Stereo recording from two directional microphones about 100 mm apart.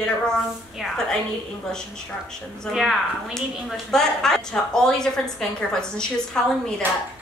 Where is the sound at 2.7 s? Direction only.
Centre (ahead or behind).